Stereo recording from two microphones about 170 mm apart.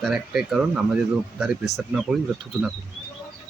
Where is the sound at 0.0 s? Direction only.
5° right (ahead or behind).